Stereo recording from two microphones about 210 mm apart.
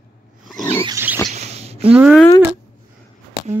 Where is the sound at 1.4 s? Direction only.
30° right (ahead or behind).